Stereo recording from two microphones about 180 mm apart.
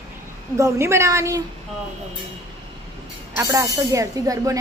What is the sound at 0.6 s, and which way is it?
Speech, 15° right (ahead or behind).